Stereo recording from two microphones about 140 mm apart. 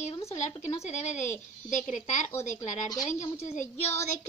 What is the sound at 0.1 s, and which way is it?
Speech, 50° left (ahead or behind).